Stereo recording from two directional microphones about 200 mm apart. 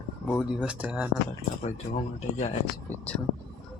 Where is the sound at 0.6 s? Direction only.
5° right (ahead or behind).